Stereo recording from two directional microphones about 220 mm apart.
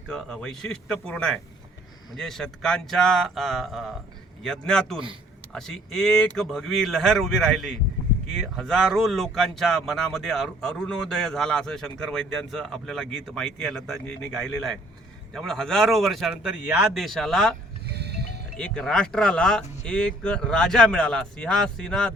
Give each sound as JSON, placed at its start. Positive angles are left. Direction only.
{"t": 0.1, "sound": "speech", "side_deg": 5}
{"t": 17.8, "sound": "music", "side_deg": -50}
{"t": 18.5, "sound": "speech", "side_deg": 5}